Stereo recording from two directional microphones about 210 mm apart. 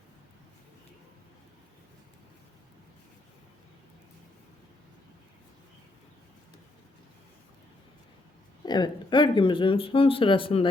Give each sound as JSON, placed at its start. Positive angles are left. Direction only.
{"t": 8.6, "sound": "speech", "side_deg": 20}